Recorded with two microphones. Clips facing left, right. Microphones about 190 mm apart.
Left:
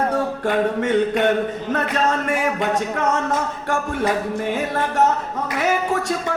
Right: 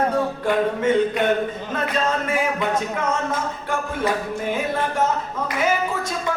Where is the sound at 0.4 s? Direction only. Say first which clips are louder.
Even; 70° left (ahead or behind).